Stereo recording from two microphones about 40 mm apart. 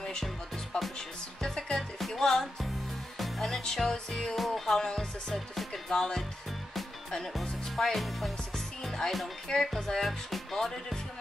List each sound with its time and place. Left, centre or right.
0.7 s music: centre
1.8 s music: centre
4.4 s music: centre
5.9 s speech: centre
7.3 s speech: centre